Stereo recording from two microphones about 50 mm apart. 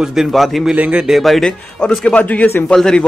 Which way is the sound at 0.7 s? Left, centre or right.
Right.